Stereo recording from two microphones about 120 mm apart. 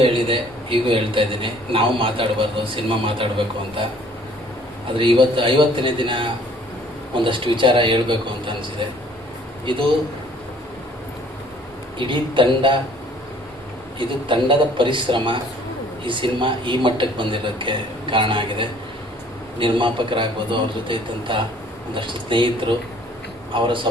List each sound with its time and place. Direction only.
0.0 s a man's voice: 45° right (ahead or behind)
4.9 s a man's voice: 45° right (ahead or behind)
9.7 s a man's voice: 40° right (ahead or behind)
11.9 s a man's voice: 45° right (ahead or behind)
14.0 s a man's voice: 45° right (ahead or behind)